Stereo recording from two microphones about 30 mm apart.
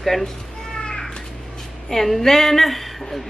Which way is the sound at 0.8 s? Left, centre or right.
Left.